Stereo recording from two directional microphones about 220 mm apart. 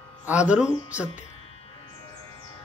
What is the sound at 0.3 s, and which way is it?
Music, 5° right (ahead or behind).